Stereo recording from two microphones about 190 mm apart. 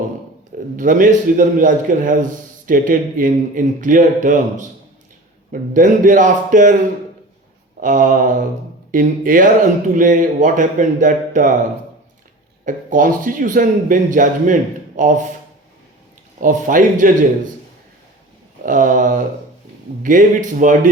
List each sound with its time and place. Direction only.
0.8 s speech: 45° right (ahead or behind)
7.8 s speech: 45° right (ahead or behind)
12.6 s speech: 45° right (ahead or behind)
16.4 s speech: 45° right (ahead or behind)
18.6 s speech: 45° right (ahead or behind)